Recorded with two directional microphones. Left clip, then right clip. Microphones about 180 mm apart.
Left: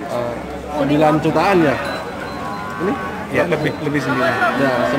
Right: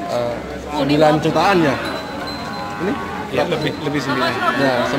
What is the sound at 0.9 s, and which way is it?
Speech, 5° right (ahead or behind).